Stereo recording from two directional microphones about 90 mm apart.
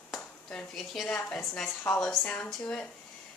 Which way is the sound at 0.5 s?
Centre (ahead or behind).